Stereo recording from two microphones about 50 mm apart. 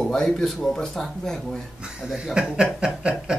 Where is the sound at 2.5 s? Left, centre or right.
Centre.